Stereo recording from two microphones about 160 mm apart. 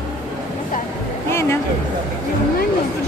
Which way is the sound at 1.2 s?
15° left (ahead or behind).